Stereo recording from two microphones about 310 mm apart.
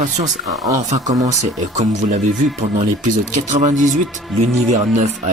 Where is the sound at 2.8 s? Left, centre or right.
Right.